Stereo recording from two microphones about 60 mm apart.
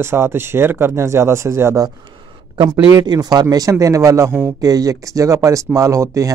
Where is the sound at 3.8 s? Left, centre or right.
Right.